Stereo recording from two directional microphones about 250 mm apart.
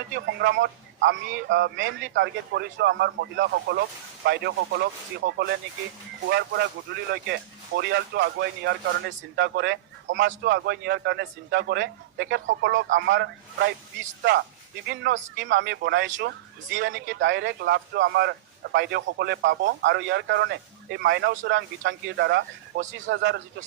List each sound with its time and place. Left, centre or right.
0.1 s a man's voice: right